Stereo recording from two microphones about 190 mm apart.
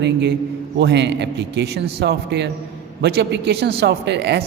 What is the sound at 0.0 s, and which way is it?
A man's voice, 65° right (ahead or behind).